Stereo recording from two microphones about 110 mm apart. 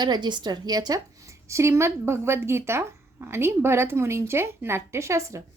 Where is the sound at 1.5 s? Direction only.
25° right (ahead or behind).